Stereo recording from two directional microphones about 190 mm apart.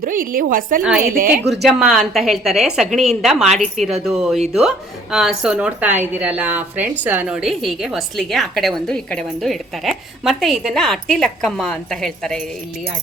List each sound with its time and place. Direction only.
0.0 s a woman's voice: 45° right (ahead or behind)
0.8 s a woman's voice: 5° right (ahead or behind)
1.1 s a woman's voice: 50° right (ahead or behind)
1.6 s a woman's voice: centre (ahead or behind)